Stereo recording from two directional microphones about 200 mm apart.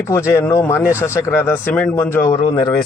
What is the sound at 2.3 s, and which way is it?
Speech, 25° left (ahead or behind).